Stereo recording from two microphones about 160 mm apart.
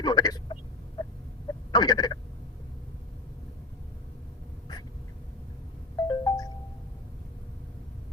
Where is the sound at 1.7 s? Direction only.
25° left (ahead or behind).